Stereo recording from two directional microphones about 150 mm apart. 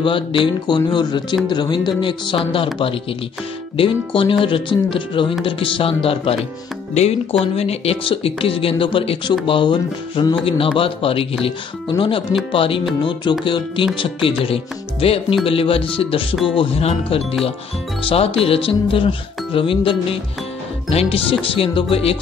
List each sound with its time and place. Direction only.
0.0 s speech: 35° left (ahead or behind)
14.4 s speech: 40° left (ahead or behind)